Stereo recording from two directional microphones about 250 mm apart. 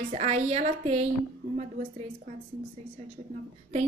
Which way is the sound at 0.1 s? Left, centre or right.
Right.